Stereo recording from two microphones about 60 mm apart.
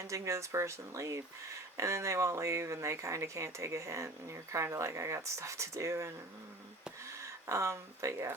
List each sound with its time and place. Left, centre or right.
0.0 s speech: right